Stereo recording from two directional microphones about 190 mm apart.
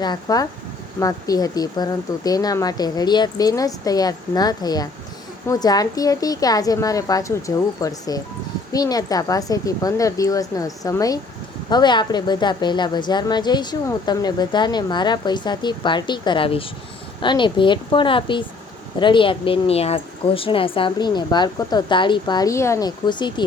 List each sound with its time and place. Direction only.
0.0 s a woman's voice: 20° left (ahead or behind)